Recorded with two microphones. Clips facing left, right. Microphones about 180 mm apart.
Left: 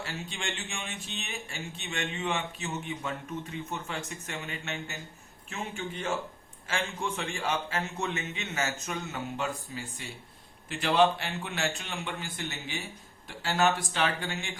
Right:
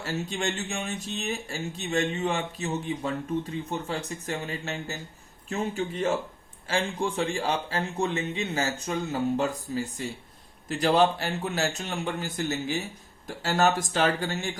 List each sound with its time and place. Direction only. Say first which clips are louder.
0.0 s a man's voice: right 7 dB; 40° right (ahead or behind)